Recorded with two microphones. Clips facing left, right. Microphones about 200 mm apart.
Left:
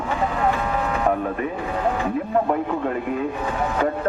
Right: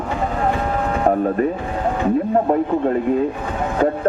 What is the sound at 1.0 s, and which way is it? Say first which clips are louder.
Speech: right 8 dB; 35° right (ahead or behind).